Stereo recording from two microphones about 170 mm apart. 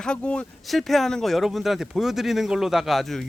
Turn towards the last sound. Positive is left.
turn(degrees=0)  # may be behind; listen again after turning